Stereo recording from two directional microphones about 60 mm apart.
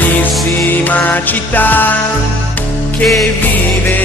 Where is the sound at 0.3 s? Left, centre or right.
Centre.